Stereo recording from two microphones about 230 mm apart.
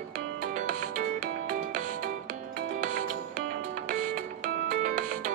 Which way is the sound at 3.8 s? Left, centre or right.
Right.